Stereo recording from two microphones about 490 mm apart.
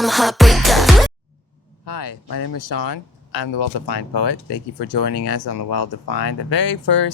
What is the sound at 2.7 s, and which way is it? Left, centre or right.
Speech, left.